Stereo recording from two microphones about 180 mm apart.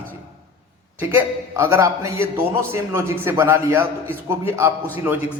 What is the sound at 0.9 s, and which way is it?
A man's voice, 15° right (ahead or behind).